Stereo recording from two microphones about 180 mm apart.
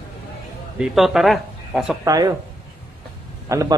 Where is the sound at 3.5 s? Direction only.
15° right (ahead or behind).